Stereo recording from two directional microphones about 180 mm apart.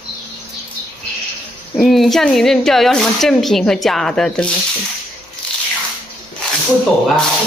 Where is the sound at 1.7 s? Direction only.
Centre (ahead or behind).